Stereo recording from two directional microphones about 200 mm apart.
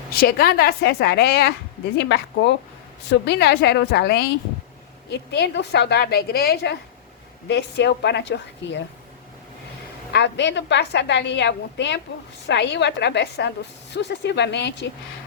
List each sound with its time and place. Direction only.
0.1 s a woman's voice: 50° left (ahead or behind)
10.1 s a woman's voice: 60° left (ahead or behind)